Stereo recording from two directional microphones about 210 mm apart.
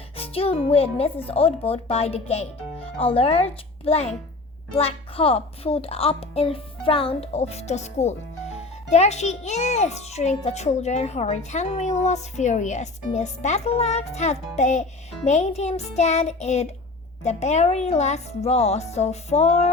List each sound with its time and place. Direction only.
0.2 s a child's voice: 25° left (ahead or behind)